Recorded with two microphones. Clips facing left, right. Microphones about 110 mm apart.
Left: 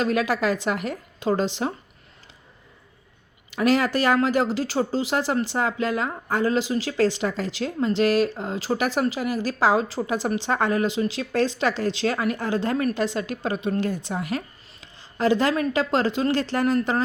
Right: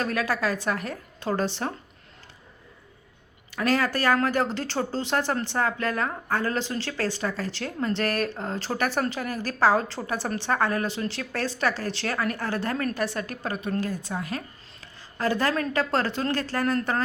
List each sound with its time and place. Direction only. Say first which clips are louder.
0.0 s a woman's voice: left 4 dB; 20° left (ahead or behind)
3.5 s a woman's voice: left 4 dB; 15° left (ahead or behind)